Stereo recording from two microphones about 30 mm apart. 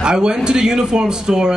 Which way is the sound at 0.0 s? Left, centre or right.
Right.